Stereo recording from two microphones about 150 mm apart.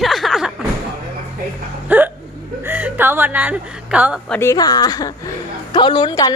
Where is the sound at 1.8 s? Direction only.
10° right (ahead or behind).